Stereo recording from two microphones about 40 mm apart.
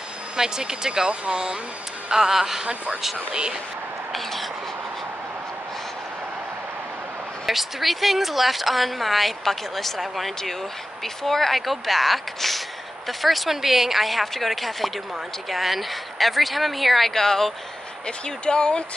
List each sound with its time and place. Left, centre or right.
0.4 s speech: centre
2.6 s speech: right
4.1 s a sound: centre
7.4 s speech: centre
18.0 s speech: left